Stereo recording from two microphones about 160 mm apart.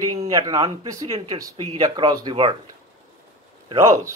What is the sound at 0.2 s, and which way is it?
Speech, 20° right (ahead or behind).